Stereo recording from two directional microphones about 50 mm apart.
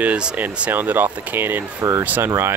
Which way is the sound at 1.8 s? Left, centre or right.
Right.